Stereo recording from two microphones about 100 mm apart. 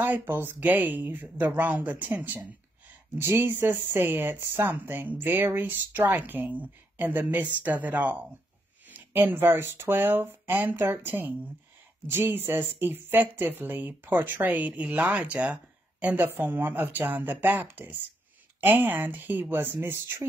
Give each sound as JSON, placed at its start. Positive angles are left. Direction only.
{"t": 0.0, "sound": "speech", "side_deg": -20}